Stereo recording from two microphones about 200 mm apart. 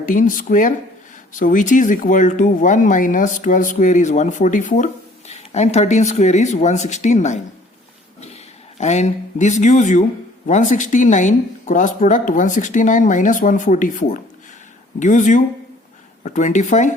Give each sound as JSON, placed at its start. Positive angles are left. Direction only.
{"t": 0.0, "sound": "speech", "side_deg": 40}
{"t": 8.8, "sound": "speech", "side_deg": 35}